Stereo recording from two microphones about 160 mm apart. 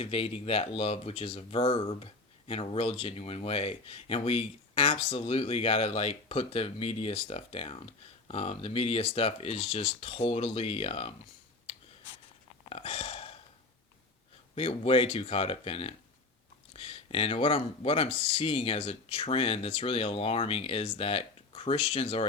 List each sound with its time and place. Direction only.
0.0 s speech: 35° left (ahead or behind)
12.6 s a sound: 35° left (ahead or behind)
14.5 s speech: 40° left (ahead or behind)